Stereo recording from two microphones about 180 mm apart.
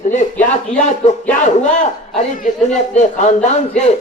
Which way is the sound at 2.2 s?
40° left (ahead or behind).